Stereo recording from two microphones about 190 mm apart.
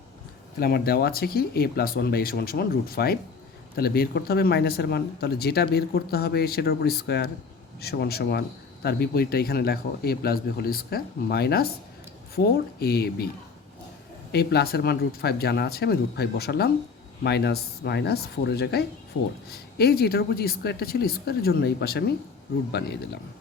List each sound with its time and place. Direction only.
0.6 s speech: 55° left (ahead or behind)
12.8 s speech: 55° left (ahead or behind)
14.3 s speech: 55° left (ahead or behind)